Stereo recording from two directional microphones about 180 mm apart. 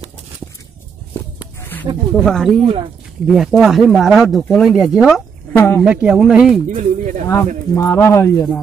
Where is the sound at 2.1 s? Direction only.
5° left (ahead or behind).